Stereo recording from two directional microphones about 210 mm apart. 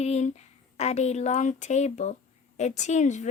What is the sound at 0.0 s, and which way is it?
Speech, 30° left (ahead or behind).